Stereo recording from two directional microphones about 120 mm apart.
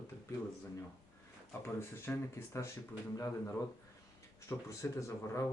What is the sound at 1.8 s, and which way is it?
Speech, 20° left (ahead or behind).